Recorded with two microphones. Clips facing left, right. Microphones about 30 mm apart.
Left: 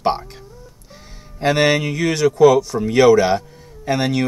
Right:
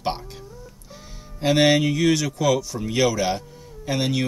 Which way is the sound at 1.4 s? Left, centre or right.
Centre.